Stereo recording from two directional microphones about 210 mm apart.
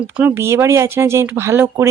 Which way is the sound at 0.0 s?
10° right (ahead or behind).